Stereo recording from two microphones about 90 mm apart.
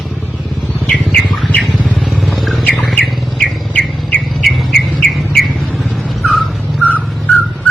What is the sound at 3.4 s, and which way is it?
Bird, 15° left (ahead or behind).